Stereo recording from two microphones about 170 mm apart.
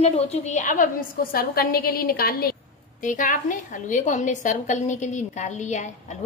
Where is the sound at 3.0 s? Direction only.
50° left (ahead or behind).